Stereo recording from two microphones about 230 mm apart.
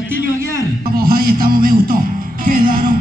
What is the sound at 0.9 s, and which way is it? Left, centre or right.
Music, right.